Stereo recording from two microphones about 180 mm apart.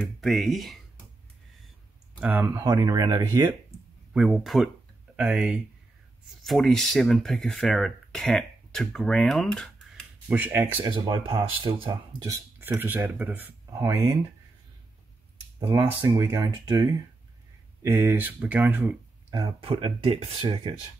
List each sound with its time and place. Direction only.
0.2 s speech: centre (ahead or behind)
2.1 s speech: 10° right (ahead or behind)
4.1 s speech: centre (ahead or behind)
10.2 s speech: 10° right (ahead or behind)
10.8 s speech: 25° right (ahead or behind)
15.6 s speech: 20° right (ahead or behind)
19.3 s speech: 20° right (ahead or behind)
19.7 s speech: 35° right (ahead or behind)